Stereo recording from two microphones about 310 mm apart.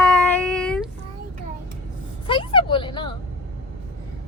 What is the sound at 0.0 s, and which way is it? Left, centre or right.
Child singing, centre.